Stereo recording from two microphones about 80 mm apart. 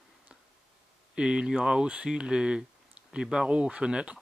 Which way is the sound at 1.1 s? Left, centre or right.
Centre.